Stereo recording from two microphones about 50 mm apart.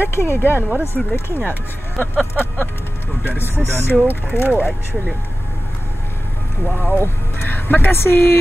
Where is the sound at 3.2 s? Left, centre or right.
Left.